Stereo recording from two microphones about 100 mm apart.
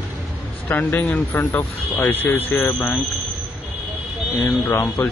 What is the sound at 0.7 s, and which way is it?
Speech, 20° left (ahead or behind).